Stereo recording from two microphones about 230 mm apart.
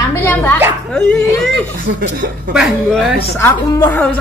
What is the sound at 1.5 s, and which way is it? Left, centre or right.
Speech, right.